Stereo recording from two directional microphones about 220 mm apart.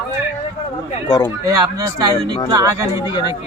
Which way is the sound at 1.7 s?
15° right (ahead or behind).